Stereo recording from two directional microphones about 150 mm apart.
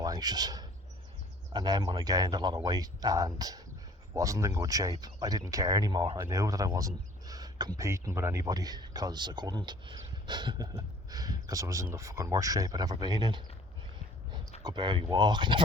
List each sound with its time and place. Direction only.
0.0 s a sound: 25° right (ahead or behind)
1.5 s speech: 25° right (ahead or behind)
14.6 s speech: 30° right (ahead or behind)